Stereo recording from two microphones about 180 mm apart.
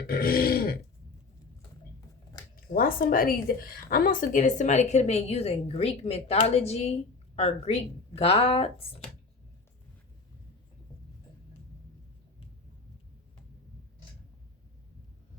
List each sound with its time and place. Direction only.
0.1 s grunt: 55° left (ahead or behind)
2.7 s a woman's voice: 50° left (ahead or behind); by 9.0 s 30° left (ahead or behind)